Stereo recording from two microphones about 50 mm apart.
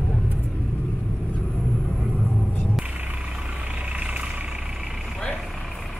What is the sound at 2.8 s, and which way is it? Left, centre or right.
Vehicle, right.